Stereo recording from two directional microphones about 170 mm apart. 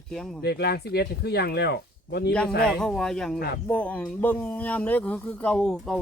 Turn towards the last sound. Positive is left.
turn(degrees=5)  # may be behind; listen again after turning